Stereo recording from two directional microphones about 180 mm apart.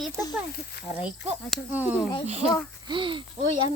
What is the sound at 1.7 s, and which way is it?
Speech, 10° right (ahead or behind).